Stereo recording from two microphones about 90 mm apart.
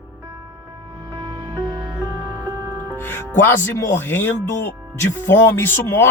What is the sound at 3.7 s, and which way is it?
Speech, 25° left (ahead or behind).